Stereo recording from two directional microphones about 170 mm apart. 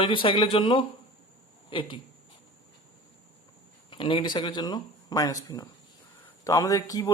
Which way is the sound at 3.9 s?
30° left (ahead or behind).